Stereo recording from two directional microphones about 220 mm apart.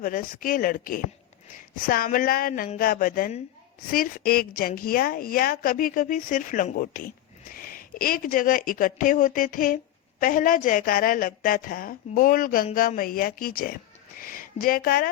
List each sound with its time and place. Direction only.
0.0 s a woman's voice: 40° left (ahead or behind)